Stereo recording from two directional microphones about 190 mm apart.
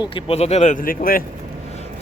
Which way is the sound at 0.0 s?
30° left (ahead or behind).